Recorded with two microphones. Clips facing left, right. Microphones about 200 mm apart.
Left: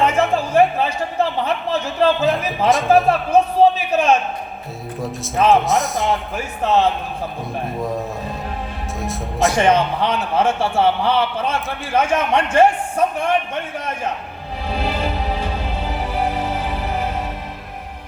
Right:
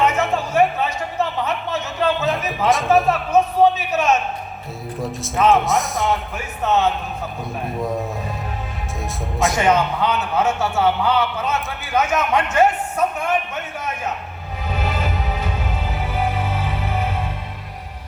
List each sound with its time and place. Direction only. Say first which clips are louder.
0.0 s speech: left 2 dB; 30° left (ahead or behind)
2.6 s a man's voice: left 2 dB; centre (ahead or behind)
3.1 s a sound: left 2 dB; 30° left (ahead or behind)
4.9 s a man's voice: left 1 dB; centre (ahead or behind)
6.3 s a man's voice: left 2 dB; 35° left (ahead or behind)
7.8 s a man's voice: right 2 dB; centre (ahead or behind)
9.6 s a man's voice: left 1 dB; 30° left (ahead or behind)
14.7 s music: left 2 dB; 30° left (ahead or behind)